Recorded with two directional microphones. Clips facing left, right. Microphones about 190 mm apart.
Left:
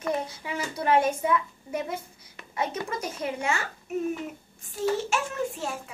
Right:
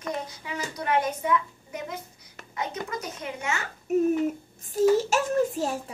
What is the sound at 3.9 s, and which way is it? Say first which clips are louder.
A child's voice: right 8 dB; 40° right (ahead or behind).